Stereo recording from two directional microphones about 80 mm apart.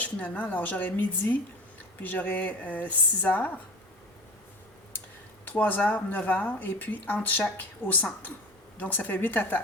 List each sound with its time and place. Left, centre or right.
0.0 s speech: centre
5.5 s speech: left